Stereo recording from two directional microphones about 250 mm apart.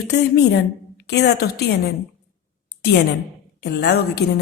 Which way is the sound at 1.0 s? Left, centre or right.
Left.